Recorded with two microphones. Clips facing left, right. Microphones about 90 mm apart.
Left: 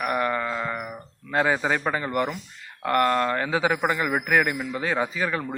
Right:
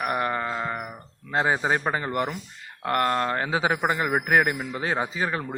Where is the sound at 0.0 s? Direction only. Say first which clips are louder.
Left 1 dB; 25° right (ahead or behind).